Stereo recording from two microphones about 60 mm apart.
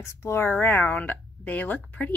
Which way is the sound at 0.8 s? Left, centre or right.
Left.